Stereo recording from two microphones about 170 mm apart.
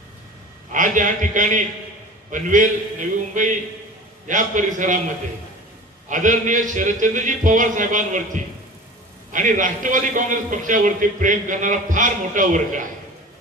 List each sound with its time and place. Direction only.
0.7 s a man's voice: 50° right (ahead or behind)
6.0 s a man's voice: 45° right (ahead or behind)